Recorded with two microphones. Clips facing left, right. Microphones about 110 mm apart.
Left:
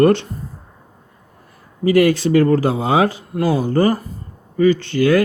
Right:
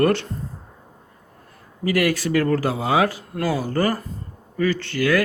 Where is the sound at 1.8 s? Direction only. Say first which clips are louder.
Left 7 dB; 25° left (ahead or behind).